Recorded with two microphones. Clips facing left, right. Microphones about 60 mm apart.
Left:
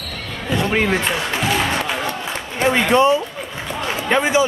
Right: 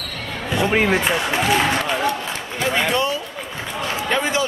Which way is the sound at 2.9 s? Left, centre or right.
Left.